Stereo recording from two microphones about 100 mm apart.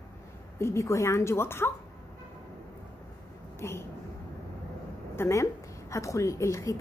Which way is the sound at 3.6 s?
25° left (ahead or behind).